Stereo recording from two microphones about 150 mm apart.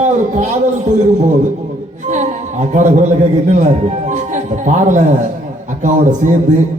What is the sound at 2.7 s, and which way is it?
A man's voice, 55° right (ahead or behind).